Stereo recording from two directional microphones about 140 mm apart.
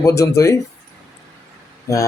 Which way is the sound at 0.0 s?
20° left (ahead or behind).